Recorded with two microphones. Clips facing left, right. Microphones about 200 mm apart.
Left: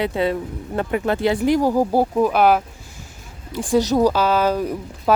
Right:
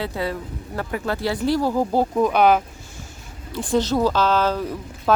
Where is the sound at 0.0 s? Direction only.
20° left (ahead or behind).